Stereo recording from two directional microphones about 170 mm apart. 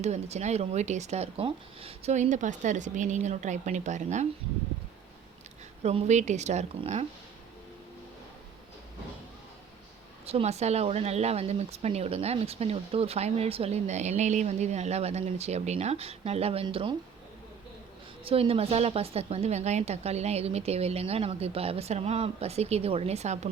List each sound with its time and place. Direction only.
0.0 s speech: 40° right (ahead or behind)
5.8 s speech: 40° right (ahead or behind)
10.2 s speech: 40° right (ahead or behind)
18.3 s speech: 35° right (ahead or behind)